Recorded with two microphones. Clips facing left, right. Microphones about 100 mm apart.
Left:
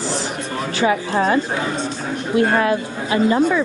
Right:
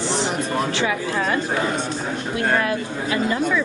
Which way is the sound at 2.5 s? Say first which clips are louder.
Left 4 dB; 30° left (ahead or behind).